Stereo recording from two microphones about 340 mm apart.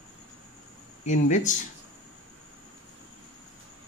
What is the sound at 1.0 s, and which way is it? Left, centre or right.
Speech, left.